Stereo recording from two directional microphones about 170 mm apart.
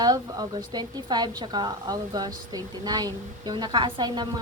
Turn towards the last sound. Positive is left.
turn(degrees=-25)  # may be behind; listen again after turning